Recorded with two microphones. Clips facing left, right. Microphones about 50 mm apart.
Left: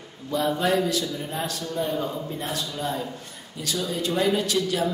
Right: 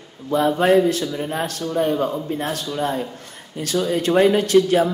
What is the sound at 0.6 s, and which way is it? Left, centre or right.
A man's voice, right.